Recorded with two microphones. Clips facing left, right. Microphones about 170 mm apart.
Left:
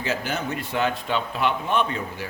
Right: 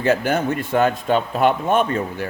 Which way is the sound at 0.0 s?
55° right (ahead or behind).